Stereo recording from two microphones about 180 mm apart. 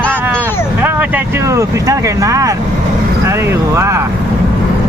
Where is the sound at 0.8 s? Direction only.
10° right (ahead or behind).